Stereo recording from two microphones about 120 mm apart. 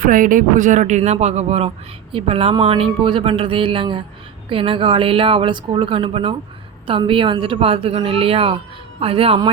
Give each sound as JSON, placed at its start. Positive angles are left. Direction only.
{"t": 0.3, "sound": "speech", "side_deg": -90}